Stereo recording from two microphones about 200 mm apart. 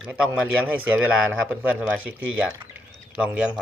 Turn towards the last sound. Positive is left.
turn(degrees=-5)  # may be behind; listen again after turning